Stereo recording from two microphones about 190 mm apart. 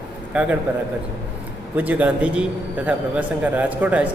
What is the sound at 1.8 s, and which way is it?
A man's voice, 5° right (ahead or behind).